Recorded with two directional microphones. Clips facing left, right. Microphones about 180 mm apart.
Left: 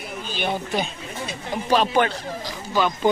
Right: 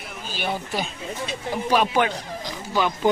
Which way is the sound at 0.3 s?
5° right (ahead or behind).